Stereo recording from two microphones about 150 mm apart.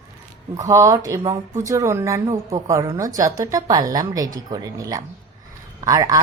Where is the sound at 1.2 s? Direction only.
40° right (ahead or behind).